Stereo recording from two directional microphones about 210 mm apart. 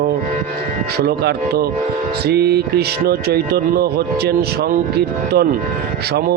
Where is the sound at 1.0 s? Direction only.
50° right (ahead or behind).